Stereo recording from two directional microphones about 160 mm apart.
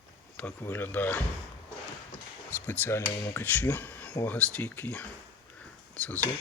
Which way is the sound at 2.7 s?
10° left (ahead or behind).